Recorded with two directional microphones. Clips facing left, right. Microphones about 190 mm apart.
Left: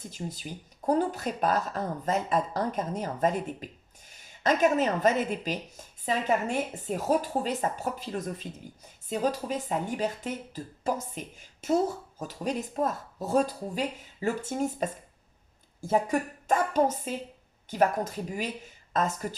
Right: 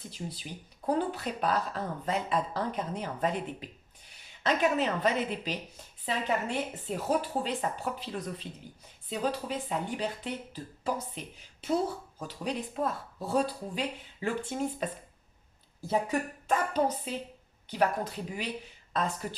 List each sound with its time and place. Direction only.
0.1 s speech: 45° left (ahead or behind)